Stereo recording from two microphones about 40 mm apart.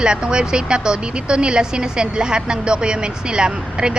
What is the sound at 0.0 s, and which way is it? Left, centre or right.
A woman's voice, right.